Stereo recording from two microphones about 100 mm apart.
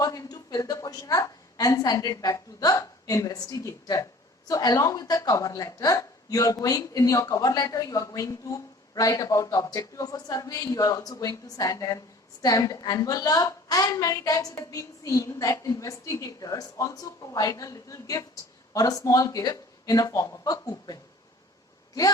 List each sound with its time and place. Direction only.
0.0 s a woman's voice: 35° left (ahead or behind)